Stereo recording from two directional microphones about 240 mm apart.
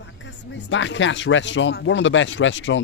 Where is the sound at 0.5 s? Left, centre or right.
Left.